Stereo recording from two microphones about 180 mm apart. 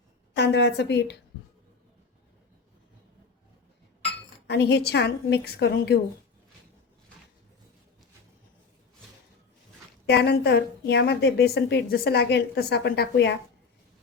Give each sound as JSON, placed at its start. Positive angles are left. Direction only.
{"t": 0.3, "sound": "a woman's voice", "side_deg": 70}
{"t": 4.4, "sound": "a woman's voice", "side_deg": 70}
{"t": 10.1, "sound": "a woman's voice", "side_deg": 70}